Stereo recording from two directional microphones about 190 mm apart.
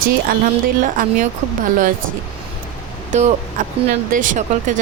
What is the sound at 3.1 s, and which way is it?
Speech, 40° right (ahead or behind).